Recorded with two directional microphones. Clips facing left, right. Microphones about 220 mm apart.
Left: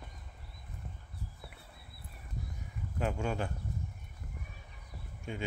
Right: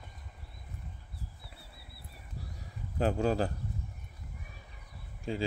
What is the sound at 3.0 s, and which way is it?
Speech, 35° right (ahead or behind).